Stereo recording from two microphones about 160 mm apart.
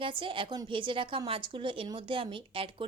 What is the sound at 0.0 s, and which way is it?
A woman's voice, 35° right (ahead or behind).